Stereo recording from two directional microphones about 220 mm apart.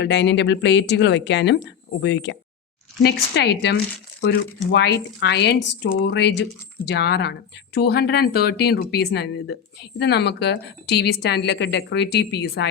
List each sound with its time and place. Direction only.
0.0 s speech: 50° left (ahead or behind)